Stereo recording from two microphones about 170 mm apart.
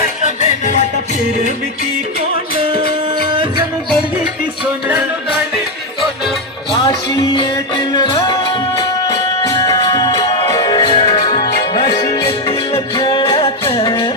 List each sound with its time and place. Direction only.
4.9 s music: 5° right (ahead or behind)
7.3 s music: 30° left (ahead or behind)
9.5 s music: 35° left (ahead or behind)